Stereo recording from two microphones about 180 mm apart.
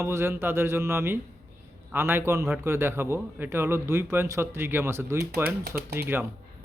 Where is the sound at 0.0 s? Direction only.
15° right (ahead or behind).